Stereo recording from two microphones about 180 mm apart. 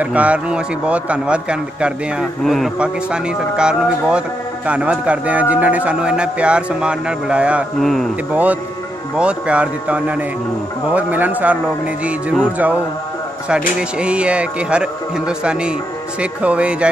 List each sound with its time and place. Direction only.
0.0 s a man's voice: 10° right (ahead or behind)
8.3 s a man's voice: 10° right (ahead or behind)